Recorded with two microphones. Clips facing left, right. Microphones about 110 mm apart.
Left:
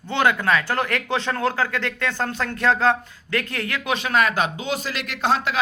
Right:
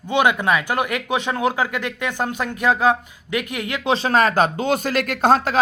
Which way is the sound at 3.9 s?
35° right (ahead or behind).